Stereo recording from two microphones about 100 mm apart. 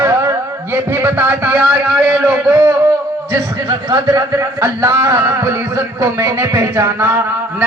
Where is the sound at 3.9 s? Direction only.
35° right (ahead or behind).